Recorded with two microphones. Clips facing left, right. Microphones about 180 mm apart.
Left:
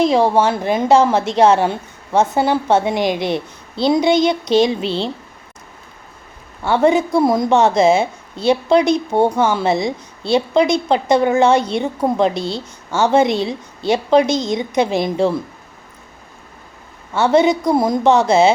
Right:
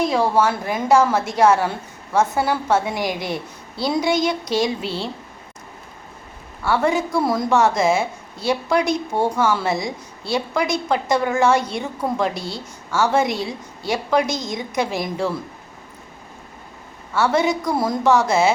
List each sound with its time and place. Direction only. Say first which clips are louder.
0.0 s a woman's voice: left 4 dB; 20° left (ahead or behind)
6.6 s a woman's voice: left 5 dB; 20° left (ahead or behind)
17.2 s a woman's voice: left 5 dB; 20° left (ahead or behind)